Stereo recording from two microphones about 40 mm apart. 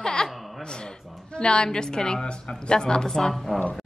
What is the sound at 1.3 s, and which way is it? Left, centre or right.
A woman's voice, left.